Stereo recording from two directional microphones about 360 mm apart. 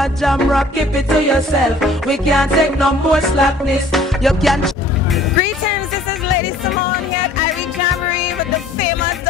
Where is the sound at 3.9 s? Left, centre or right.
Centre.